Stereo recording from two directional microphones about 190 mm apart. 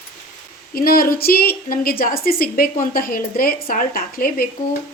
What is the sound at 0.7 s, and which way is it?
A woman's voice, 50° left (ahead or behind).